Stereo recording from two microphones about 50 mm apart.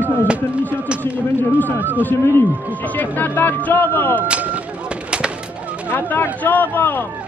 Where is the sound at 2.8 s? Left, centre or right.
Left.